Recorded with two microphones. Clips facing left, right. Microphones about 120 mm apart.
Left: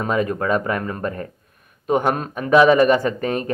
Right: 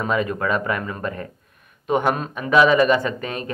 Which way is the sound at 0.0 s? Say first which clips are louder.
Left 1 dB; 40° left (ahead or behind).